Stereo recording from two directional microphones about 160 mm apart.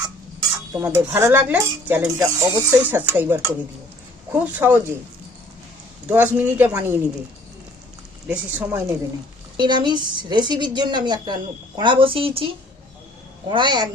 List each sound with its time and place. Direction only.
0.7 s speech: 15° right (ahead or behind)
6.1 s speech: 10° right (ahead or behind)
8.3 s speech: 10° right (ahead or behind)
9.6 s a woman's voice: 30° right (ahead or behind)
13.5 s a woman's voice: 30° right (ahead or behind)